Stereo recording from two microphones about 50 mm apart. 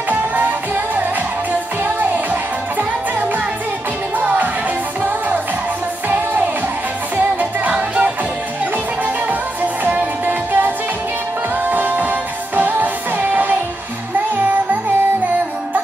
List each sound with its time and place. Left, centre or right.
4.2 s music: right
6.0 s music: right
9.8 s music: right
11.7 s music: right